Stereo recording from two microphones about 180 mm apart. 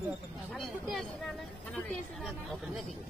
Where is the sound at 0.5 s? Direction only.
Centre (ahead or behind).